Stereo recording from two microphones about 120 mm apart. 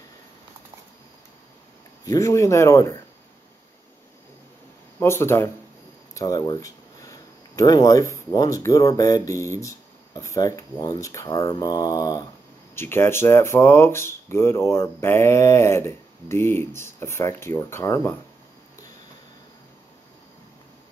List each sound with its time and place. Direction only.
2.0 s speech: 25° left (ahead or behind)
5.0 s speech: 20° left (ahead or behind)
6.1 s a sound: 30° left (ahead or behind)
8.3 s speech: 30° left (ahead or behind)
12.7 s speech: 20° left (ahead or behind)